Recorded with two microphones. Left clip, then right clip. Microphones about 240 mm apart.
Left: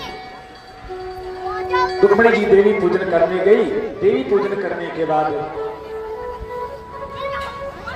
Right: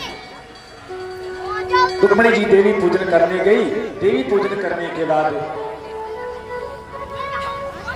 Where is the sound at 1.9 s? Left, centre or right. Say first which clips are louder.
Left 4 dB; right.